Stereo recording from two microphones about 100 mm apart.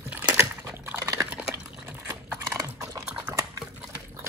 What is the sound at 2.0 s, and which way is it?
Horse, 25° right (ahead or behind).